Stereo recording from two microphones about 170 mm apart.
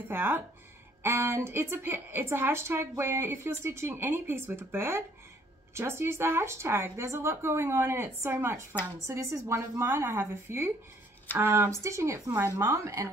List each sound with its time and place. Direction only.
0.1 s a woman's voice: 15° right (ahead or behind)